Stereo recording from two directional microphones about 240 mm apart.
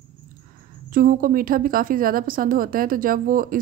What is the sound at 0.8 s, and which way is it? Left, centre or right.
A woman's voice, right.